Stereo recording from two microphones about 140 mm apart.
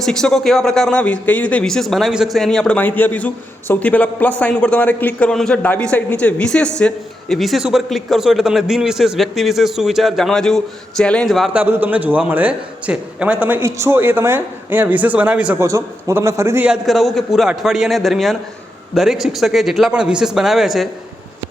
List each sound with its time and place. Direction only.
0.0 s speech: 5° left (ahead or behind)
11.5 s a man's voice: 15° right (ahead or behind)
15.6 s a man's voice: 20° right (ahead or behind)
16.6 s speech: centre (ahead or behind)